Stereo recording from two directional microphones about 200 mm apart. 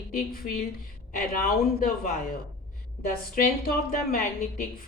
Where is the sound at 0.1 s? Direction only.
45° left (ahead or behind).